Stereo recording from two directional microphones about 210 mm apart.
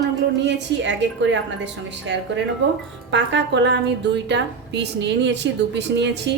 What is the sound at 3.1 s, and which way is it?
A woman's voice, 60° right (ahead or behind).